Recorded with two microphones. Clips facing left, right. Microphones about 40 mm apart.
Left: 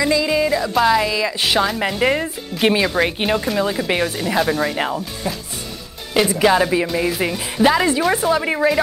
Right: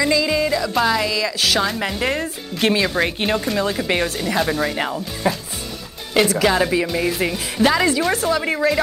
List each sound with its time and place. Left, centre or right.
0.0 s music: centre
0.7 s speech: centre
1.1 s speech: left
1.6 s speech: centre
5.2 s speech: right
6.3 s speech: centre